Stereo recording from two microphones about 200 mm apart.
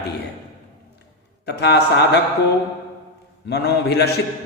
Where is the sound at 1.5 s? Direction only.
55° left (ahead or behind).